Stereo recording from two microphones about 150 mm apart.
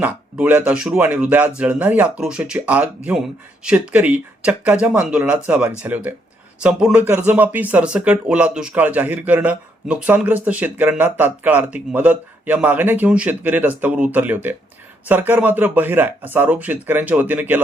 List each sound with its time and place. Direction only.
0.0 s speech: 10° right (ahead or behind)